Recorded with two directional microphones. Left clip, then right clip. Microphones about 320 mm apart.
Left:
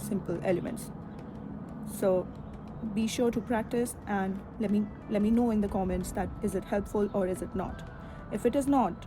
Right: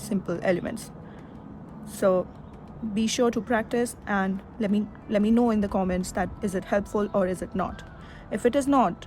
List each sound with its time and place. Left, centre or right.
0.0 s speech: right
1.8 s vehicle: right
2.9 s a woman's voice: right